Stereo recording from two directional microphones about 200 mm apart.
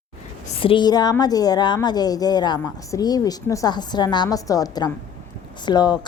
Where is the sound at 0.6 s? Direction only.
25° left (ahead or behind).